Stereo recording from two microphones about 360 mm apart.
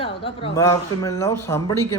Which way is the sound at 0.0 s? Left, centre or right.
Centre.